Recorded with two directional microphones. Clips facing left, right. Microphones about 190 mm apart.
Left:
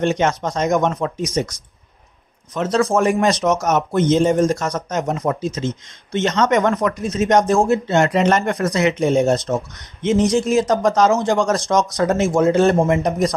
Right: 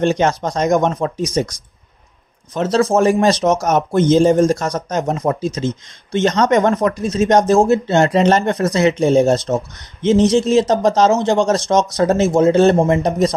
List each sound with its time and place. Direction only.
0.0 s speech: 35° right (ahead or behind)